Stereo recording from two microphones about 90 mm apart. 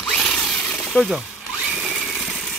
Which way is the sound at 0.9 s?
10° left (ahead or behind).